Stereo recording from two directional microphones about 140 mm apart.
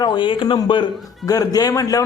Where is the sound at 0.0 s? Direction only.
35° left (ahead or behind).